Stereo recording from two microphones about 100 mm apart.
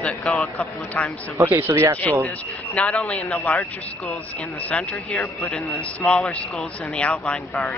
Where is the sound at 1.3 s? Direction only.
25° right (ahead or behind).